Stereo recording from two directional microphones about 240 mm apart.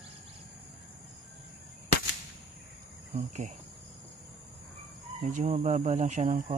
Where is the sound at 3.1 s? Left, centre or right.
Right.